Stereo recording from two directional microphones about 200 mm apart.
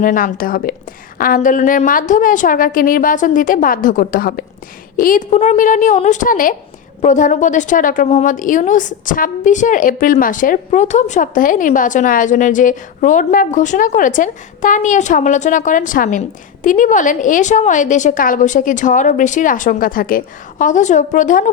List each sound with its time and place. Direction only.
0.0 s a woman's voice: 45° left (ahead or behind)